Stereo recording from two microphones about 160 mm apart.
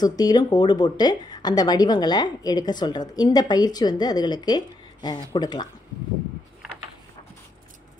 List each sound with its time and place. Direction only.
0.0 s speech: 25° left (ahead or behind)